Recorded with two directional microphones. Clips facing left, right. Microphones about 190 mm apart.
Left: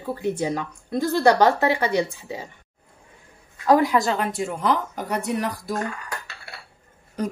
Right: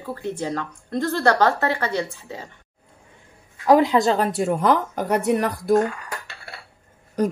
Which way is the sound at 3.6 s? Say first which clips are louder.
Right 2 dB; 20° right (ahead or behind).